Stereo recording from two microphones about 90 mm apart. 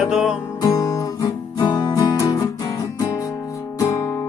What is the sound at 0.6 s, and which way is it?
Guitar, 45° left (ahead or behind).